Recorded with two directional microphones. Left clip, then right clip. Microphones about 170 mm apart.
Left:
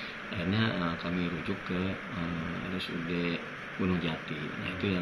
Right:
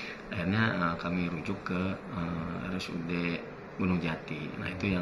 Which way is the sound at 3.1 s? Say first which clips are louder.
Even; 30° right (ahead or behind).